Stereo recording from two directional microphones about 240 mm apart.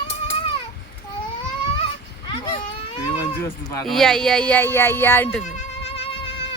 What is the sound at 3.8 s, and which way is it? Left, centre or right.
Speech, centre.